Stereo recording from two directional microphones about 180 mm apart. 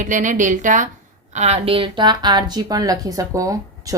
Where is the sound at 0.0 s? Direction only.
45° right (ahead or behind).